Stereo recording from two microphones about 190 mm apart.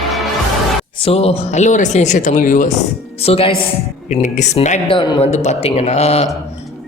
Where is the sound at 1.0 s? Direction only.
30° left (ahead or behind).